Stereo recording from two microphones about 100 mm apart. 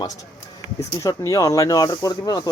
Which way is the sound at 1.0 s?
35° left (ahead or behind).